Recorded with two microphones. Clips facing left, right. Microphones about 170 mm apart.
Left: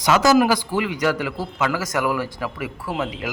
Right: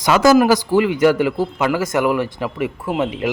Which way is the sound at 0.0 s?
50° right (ahead or behind).